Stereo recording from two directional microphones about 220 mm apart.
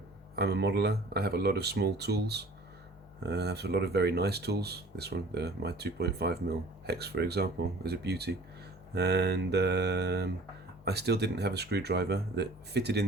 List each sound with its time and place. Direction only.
0.3 s speech: 50° right (ahead or behind)